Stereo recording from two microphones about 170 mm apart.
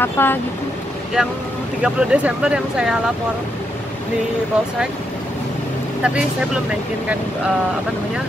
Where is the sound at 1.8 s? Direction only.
5° right (ahead or behind).